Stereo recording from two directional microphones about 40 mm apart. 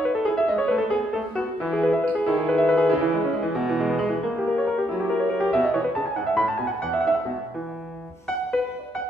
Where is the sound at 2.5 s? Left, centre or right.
Centre.